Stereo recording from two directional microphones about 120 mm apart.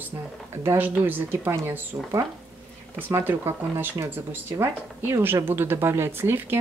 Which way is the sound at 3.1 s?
20° right (ahead or behind).